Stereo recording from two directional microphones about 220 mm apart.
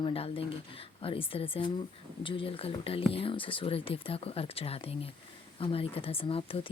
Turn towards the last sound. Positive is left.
turn(degrees=25)  # may be behind; listen again after turning